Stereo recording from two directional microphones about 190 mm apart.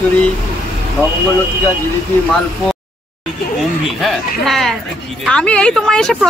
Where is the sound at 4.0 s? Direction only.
Centre (ahead or behind).